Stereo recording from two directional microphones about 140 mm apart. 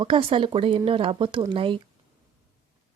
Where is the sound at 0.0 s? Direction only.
40° right (ahead or behind).